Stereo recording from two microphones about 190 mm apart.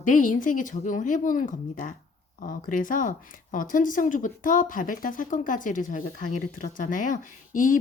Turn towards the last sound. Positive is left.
turn(degrees=45)  # may be behind; listen again after turning